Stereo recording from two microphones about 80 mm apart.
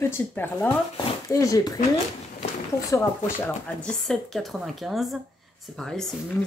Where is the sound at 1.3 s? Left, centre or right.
Left.